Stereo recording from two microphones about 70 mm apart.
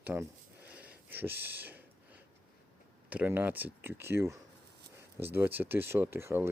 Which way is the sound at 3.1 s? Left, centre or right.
Right.